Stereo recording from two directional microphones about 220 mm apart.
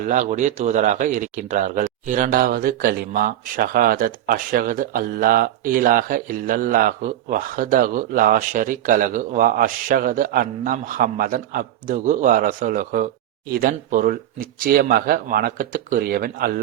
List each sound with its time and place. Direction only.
0.0 s speech: 35° right (ahead or behind)